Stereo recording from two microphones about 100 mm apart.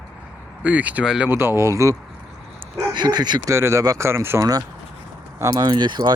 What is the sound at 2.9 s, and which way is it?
Speech, 45° right (ahead or behind).